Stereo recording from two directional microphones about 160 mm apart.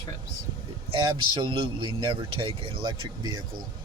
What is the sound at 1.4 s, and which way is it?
Speech, 30° right (ahead or behind).